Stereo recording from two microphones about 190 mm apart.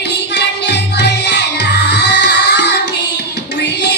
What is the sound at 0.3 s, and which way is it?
Music, 60° left (ahead or behind).